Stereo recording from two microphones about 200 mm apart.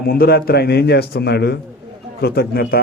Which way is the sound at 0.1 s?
50° left (ahead or behind).